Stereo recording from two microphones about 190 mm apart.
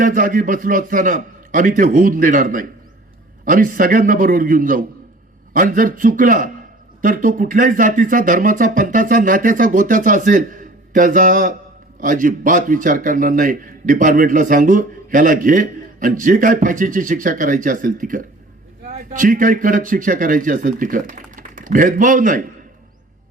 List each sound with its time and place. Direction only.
0.0 s speech: 45° right (ahead or behind)